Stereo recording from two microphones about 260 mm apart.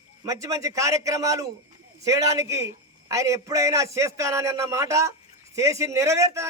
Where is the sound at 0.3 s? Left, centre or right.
Centre.